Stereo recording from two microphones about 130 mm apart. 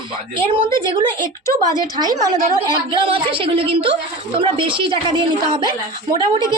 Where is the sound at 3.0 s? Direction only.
45° right (ahead or behind).